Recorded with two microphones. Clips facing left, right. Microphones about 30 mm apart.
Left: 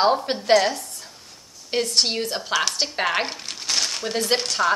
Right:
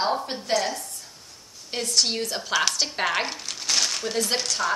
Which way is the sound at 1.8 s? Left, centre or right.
Left.